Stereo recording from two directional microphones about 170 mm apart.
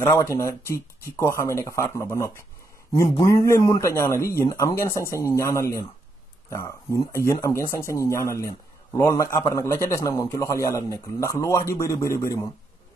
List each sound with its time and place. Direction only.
0.0 s a man's voice: 15° left (ahead or behind)